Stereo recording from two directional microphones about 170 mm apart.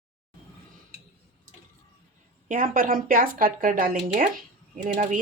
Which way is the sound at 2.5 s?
55° right (ahead or behind).